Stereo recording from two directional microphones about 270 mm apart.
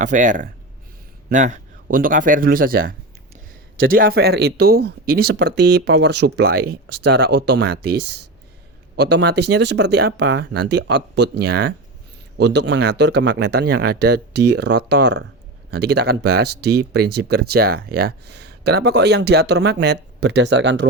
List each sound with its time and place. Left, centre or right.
0.0 s speech: right
3.9 s speech: right